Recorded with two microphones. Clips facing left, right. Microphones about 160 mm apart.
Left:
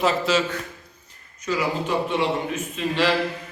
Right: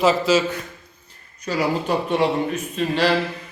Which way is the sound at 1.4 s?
35° right (ahead or behind).